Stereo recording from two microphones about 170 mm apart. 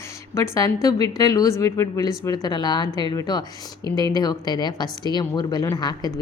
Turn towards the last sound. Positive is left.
turn(degrees=25)  # may be behind; listen again after turning